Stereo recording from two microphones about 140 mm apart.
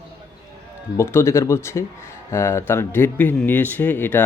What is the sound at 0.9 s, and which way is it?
Speech, 20° left (ahead or behind).